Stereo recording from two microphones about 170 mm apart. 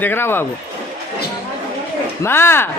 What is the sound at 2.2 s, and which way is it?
Speech, 15° left (ahead or behind).